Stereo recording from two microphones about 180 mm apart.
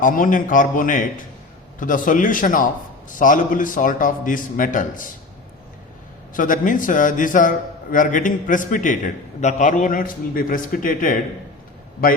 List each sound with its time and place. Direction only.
0.0 s a man's voice: 45° left (ahead or behind)
6.3 s a man's voice: 50° left (ahead or behind)